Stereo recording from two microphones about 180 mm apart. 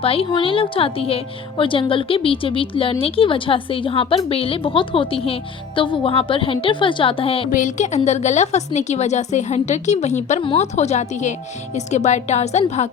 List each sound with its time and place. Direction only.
0.0 s a woman's voice: 30° left (ahead or behind)
7.5 s a woman's voice: 45° left (ahead or behind)